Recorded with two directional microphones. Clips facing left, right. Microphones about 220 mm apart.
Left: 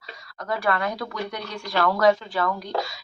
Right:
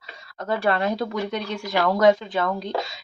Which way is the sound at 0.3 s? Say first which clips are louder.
Right 3 dB; 25° right (ahead or behind).